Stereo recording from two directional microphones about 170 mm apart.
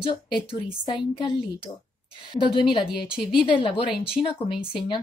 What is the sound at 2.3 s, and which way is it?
A woman's voice, 25° left (ahead or behind).